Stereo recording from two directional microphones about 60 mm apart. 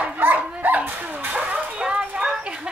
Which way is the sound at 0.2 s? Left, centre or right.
Right.